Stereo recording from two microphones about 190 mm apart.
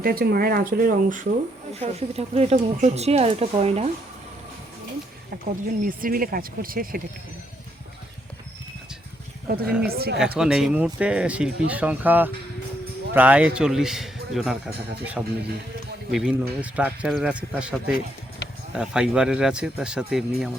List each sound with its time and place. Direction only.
0.0 s speech: 50° right (ahead or behind)
1.8 s speech: 35° right (ahead or behind)
5.5 s speech: 45° right (ahead or behind)
9.6 s a man's voice: 5° right (ahead or behind)
9.9 s speech: 55° right (ahead or behind)
10.3 s a man's voice: 5° right (ahead or behind)